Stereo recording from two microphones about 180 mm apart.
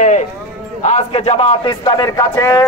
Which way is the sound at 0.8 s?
35° left (ahead or behind).